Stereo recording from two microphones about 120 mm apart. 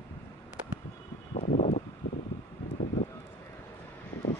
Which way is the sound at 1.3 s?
90° left.